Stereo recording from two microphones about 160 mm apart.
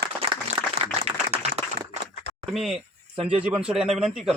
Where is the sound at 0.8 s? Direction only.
40° right (ahead or behind).